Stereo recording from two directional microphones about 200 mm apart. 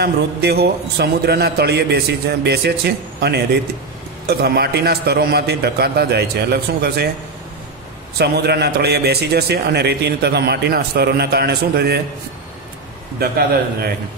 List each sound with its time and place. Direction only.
0.0 s a man's voice: 55° right (ahead or behind)
8.2 s a man's voice: 55° right (ahead or behind)